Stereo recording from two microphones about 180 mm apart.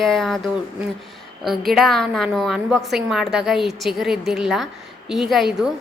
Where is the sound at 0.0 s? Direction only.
Centre (ahead or behind).